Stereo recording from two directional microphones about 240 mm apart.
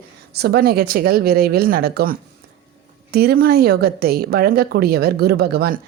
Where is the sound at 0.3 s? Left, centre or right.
Right.